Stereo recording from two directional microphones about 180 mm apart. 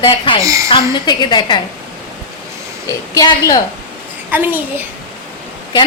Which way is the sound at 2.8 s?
20° left (ahead or behind).